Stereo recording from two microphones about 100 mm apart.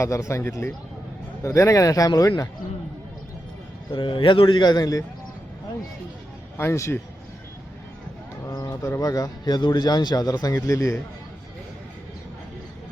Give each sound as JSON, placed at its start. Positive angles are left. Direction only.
{"t": 0.0, "sound": "speech", "side_deg": 30}
{"t": 3.9, "sound": "a man's voice", "side_deg": 55}
{"t": 6.6, "sound": "speech", "side_deg": 30}
{"t": 8.4, "sound": "speech", "side_deg": 35}